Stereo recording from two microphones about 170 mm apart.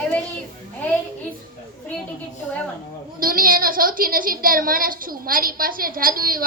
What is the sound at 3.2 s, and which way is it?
A woman's voice, 55° right (ahead or behind).